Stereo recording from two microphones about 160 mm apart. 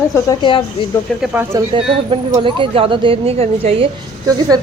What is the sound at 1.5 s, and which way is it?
Speech, 25° right (ahead or behind).